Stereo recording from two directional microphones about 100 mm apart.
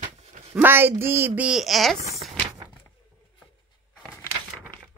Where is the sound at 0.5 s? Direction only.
20° right (ahead or behind).